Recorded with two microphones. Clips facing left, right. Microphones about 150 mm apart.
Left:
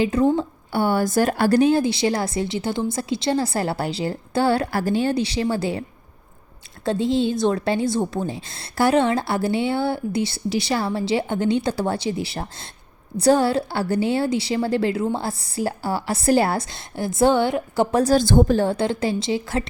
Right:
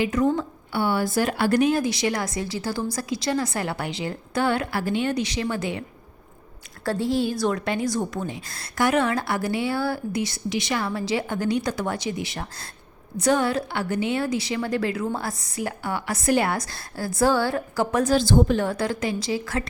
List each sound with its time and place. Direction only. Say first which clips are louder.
0.0 s a woman's voice: left 3 dB; 30° left (ahead or behind)
0.7 s a woman's voice: left 3 dB; 45° left (ahead or behind)
6.8 s a woman's voice: left 3 dB; 20° left (ahead or behind); by 18.3 s 35° left (ahead or behind)
18.3 s a woman's voice: left 2 dB; 55° left (ahead or behind)
18.5 s a woman's voice: left 4 dB; 30° left (ahead or behind)